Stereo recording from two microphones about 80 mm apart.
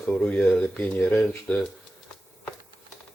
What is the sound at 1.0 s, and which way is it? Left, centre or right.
Speech, left.